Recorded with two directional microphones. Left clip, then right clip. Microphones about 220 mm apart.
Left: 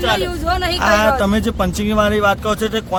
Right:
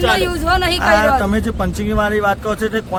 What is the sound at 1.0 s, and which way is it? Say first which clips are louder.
Speech: right 1 dB; 40° left (ahead or behind).